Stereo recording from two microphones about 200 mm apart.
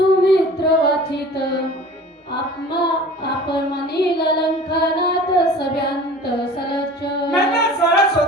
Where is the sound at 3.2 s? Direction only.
55° left (ahead or behind).